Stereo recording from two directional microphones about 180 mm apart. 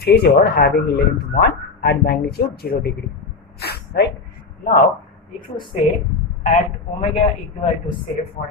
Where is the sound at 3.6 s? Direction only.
65° left (ahead or behind).